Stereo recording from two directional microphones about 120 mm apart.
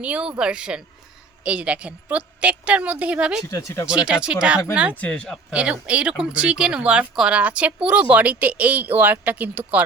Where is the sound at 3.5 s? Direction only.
20° left (ahead or behind).